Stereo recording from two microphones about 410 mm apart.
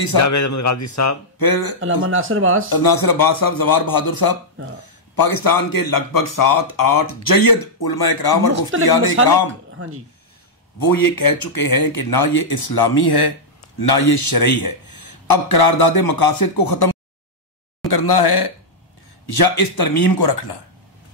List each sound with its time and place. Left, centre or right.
0.2 s a man's voice: left
1.4 s speech: left
2.0 s speech: right
2.7 s a man's voice: left
9.8 s speech: right
10.8 s speech: left
17.8 s speech: left
19.2 s speech: left